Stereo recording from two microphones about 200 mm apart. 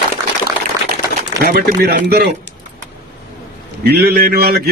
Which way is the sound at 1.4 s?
50° right (ahead or behind).